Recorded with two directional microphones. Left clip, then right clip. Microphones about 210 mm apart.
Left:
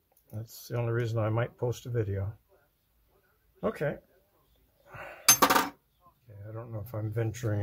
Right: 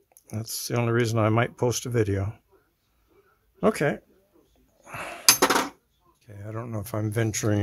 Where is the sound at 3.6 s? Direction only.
55° right (ahead or behind).